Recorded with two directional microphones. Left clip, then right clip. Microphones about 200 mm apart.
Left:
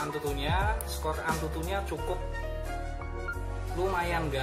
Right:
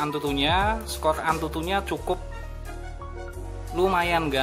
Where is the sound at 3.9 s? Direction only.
55° right (ahead or behind).